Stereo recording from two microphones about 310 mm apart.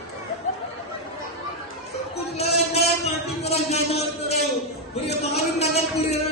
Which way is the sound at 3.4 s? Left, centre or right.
Centre.